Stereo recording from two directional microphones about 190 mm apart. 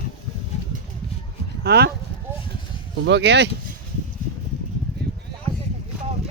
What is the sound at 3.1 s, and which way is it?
Speech, 65° right (ahead or behind).